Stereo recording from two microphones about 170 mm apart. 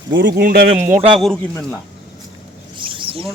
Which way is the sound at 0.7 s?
40° right (ahead or behind).